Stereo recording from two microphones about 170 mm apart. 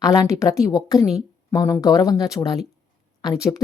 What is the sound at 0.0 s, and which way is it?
A woman's voice, 20° left (ahead or behind).